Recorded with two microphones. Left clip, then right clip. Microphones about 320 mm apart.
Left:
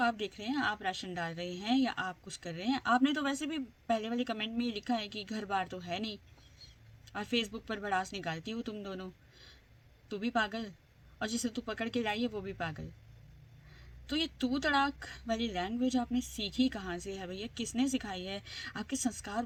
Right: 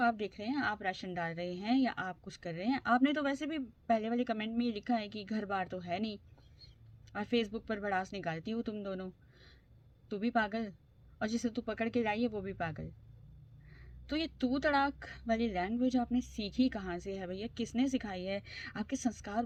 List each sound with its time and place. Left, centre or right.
0.0 s a woman's voice: centre
14.1 s a woman's voice: centre